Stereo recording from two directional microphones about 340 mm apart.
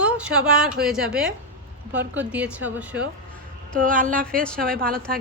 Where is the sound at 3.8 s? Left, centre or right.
Right.